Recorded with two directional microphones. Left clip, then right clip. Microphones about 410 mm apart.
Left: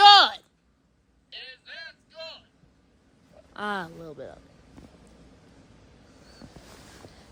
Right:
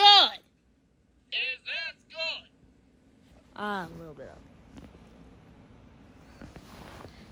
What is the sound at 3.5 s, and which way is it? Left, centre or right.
Speech, centre.